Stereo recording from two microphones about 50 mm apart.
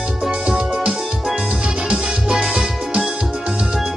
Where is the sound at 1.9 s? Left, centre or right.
Right.